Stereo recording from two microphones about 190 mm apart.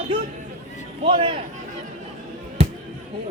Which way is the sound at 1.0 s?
30° right (ahead or behind).